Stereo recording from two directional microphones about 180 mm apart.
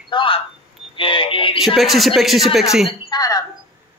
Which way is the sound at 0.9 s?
30° left (ahead or behind).